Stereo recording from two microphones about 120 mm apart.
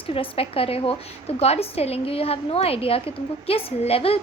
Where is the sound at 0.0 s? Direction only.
50° left (ahead or behind).